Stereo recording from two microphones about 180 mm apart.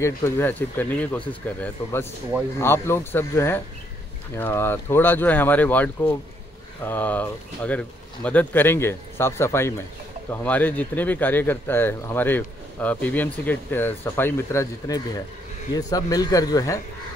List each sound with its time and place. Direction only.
0.0 s speech: 15° left (ahead or behind)